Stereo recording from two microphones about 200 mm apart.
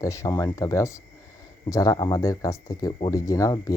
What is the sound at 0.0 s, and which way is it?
Speech, 15° left (ahead or behind).